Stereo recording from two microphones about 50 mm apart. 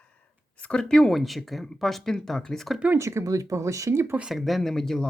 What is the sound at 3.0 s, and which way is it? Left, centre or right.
Speech, right.